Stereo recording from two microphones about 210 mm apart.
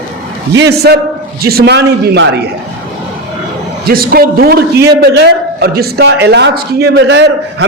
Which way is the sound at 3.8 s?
45° right (ahead or behind).